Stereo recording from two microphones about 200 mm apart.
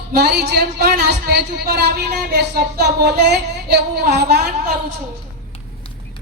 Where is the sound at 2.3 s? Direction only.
55° right (ahead or behind).